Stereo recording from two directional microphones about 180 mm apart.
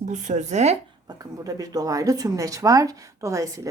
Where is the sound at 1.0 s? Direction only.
20° right (ahead or behind).